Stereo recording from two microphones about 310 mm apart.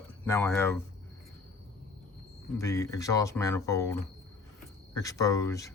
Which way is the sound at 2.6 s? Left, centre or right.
Centre.